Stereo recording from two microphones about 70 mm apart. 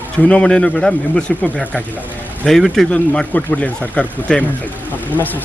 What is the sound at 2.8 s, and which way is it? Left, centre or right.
Speech, centre.